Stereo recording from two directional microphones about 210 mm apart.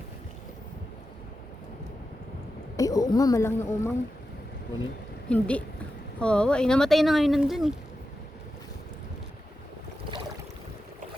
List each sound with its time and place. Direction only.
2.7 s speech: 15° left (ahead or behind)
5.3 s speech: 5° left (ahead or behind)